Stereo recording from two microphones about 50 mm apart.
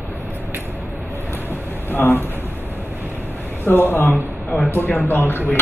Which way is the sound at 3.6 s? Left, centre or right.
Left.